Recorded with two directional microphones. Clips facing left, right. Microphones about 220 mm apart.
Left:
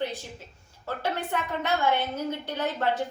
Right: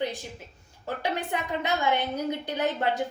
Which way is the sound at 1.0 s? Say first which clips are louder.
Even; 15° right (ahead or behind).